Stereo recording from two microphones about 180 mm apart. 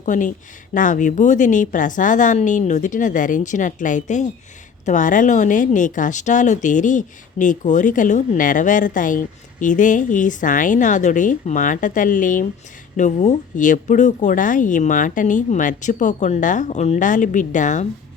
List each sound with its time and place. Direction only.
0.0 s speech: 45° left (ahead or behind)